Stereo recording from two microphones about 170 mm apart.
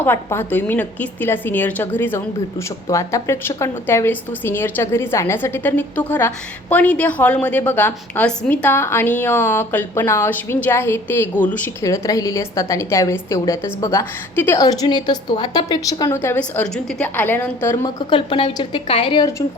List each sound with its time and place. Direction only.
0.0 s a woman's voice: 15° left (ahead or behind)
17.8 s speech: 30° left (ahead or behind)